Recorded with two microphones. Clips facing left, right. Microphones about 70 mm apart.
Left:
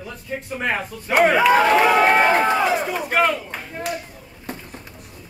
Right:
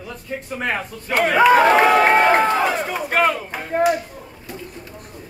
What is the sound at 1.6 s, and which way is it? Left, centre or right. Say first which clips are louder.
Speech: right 2 dB; centre.